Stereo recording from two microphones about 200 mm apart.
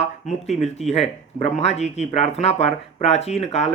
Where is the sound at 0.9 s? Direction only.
35° left (ahead or behind).